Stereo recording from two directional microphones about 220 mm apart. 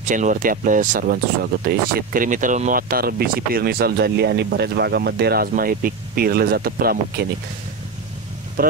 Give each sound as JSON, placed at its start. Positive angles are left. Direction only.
{"t": 0.0, "sound": "speech", "side_deg": -35}
{"t": 8.6, "sound": "speech", "side_deg": -40}